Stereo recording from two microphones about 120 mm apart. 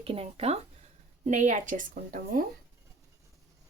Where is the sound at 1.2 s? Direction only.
85° right.